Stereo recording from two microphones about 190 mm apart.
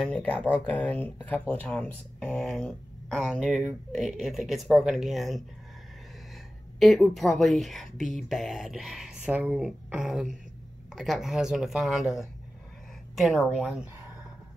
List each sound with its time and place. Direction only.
0.0 s speech: 5° left (ahead or behind)
6.8 s speech: centre (ahead or behind)